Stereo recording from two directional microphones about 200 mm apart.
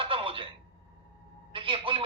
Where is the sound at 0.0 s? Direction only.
25° right (ahead or behind).